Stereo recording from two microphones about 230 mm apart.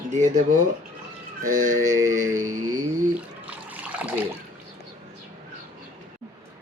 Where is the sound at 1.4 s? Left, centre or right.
Right.